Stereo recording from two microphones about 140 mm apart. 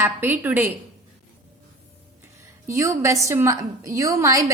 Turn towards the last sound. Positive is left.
turn(degrees=-20)  # may be behind; listen again after turning